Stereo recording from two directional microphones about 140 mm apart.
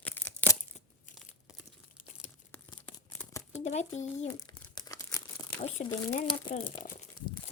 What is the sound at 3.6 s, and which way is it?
Speech, 55° left (ahead or behind).